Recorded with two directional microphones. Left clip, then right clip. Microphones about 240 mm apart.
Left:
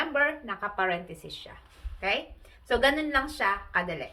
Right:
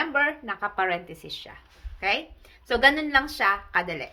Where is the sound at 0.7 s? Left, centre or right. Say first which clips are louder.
Right 1 dB; right.